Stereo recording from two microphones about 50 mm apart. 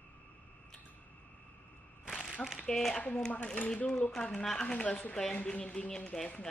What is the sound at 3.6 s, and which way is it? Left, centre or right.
Speech, left.